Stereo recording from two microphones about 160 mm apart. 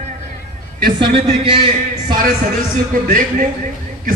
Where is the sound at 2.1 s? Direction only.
60° right (ahead or behind).